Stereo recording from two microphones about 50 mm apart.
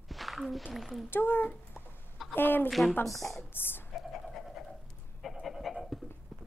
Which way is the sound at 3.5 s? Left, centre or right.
Left.